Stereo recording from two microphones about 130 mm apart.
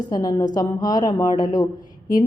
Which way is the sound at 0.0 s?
30° left (ahead or behind).